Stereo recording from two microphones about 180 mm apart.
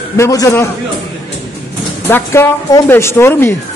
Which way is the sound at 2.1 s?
10° left (ahead or behind).